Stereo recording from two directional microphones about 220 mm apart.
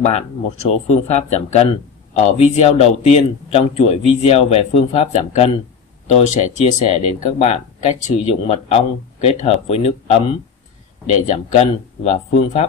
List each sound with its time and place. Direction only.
0.0 s speech: 30° left (ahead or behind)